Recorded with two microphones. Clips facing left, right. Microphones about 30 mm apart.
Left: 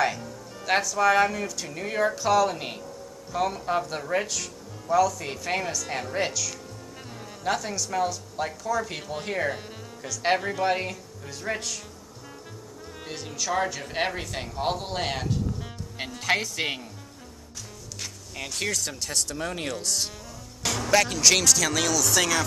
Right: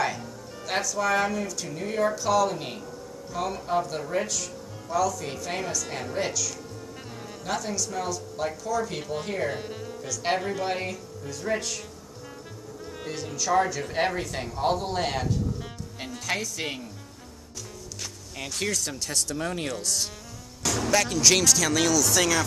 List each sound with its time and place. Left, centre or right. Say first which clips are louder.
0.7 s speech: left 4 dB; centre
1.8 s speech: even; left
5.8 s speech: left 2 dB; centre
9.5 s speech: even; centre
10.0 s speech: left 2 dB; centre
11.5 s speech: right 2 dB; left
13.0 s music: right 1 dB; centre
13.6 s speech: right 3 dB; centre
16.3 s speech: left 4 dB; left
18.4 s speech: even; centre